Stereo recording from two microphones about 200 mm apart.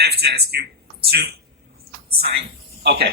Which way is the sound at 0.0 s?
55° right (ahead or behind).